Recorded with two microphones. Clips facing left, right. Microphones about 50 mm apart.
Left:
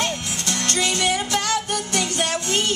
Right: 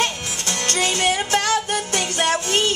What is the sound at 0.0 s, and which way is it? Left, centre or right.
Music, right.